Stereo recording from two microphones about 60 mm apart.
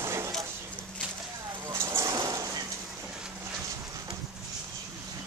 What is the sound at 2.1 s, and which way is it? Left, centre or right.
Dog, right.